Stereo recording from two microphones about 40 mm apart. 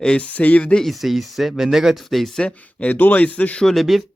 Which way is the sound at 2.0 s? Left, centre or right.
Centre.